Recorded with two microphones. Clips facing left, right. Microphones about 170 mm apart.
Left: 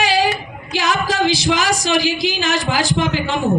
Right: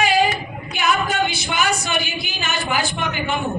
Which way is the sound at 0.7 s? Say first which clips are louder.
Left 2 dB; 90° left.